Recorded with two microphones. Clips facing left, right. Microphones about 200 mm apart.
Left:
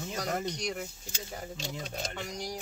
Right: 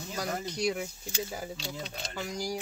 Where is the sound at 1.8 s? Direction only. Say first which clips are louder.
Left 2 dB; 45° left (ahead or behind).